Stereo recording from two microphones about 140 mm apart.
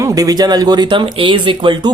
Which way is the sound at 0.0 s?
25° right (ahead or behind).